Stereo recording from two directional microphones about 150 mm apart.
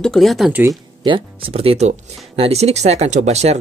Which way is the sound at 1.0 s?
35° right (ahead or behind).